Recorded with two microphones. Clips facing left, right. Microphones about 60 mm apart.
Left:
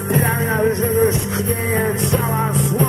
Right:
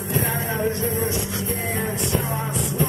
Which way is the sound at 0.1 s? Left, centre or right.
Left.